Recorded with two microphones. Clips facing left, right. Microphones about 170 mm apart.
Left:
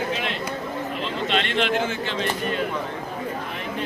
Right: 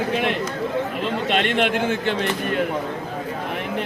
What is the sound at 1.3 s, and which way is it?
Speech, 55° right (ahead or behind).